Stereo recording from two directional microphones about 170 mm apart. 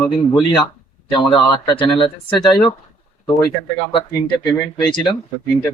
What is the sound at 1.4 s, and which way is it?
Speech, 25° left (ahead or behind).